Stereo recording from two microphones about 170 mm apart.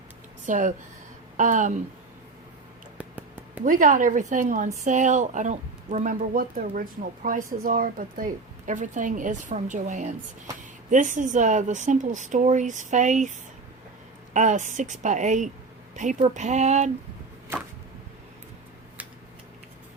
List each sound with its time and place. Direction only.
0.4 s a woman's voice: 50° right (ahead or behind)
3.0 s finger snapping: 10° right (ahead or behind)
3.6 s a woman's voice: 50° right (ahead or behind)
14.3 s a woman's voice: 45° right (ahead or behind)